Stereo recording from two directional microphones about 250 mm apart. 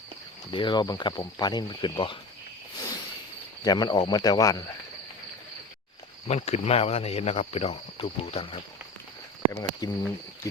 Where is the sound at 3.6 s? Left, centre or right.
Centre.